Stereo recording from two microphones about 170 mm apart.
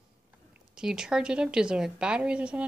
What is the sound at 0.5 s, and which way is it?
Speech, 5° right (ahead or behind).